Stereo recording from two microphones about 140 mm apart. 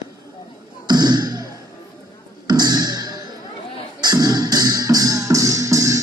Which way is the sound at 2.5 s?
30° right (ahead or behind).